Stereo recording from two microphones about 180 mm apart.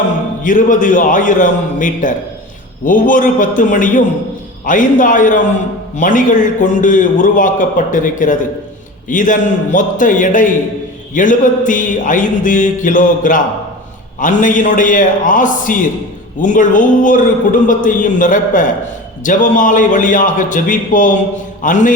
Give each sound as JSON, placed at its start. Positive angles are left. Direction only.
{"t": 0.4, "sound": "a man's voice", "side_deg": 45}